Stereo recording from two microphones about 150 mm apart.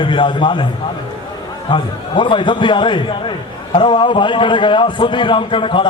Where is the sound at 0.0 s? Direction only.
35° left (ahead or behind).